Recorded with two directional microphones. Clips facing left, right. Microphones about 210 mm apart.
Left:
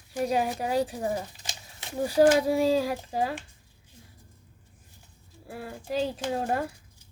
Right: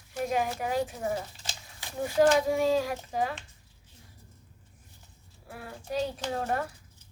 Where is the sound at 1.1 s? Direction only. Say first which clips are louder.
Left 1 dB; 20° left (ahead or behind).